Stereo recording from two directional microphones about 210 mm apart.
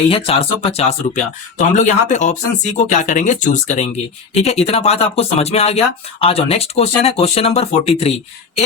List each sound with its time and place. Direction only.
0.1 s speech: 25° left (ahead or behind)